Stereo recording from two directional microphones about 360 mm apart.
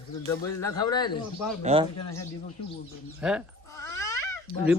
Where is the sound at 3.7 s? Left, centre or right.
Centre.